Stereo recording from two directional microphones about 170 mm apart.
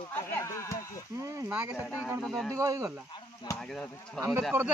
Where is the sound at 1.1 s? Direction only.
15° right (ahead or behind); by 2.5 s centre (ahead or behind).